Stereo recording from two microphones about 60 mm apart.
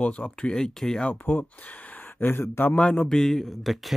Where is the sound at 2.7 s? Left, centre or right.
Centre.